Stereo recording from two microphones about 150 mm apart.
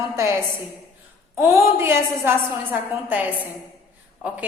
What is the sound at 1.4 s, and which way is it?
Speech, 15° right (ahead or behind).